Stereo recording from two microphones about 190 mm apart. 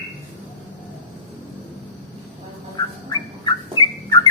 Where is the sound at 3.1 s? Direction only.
20° left (ahead or behind).